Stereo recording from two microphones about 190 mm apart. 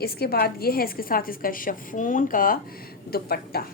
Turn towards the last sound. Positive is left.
turn(degrees=55)  # may be behind; listen again after turning